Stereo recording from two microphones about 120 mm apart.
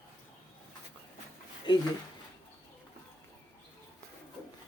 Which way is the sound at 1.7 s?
40° left (ahead or behind).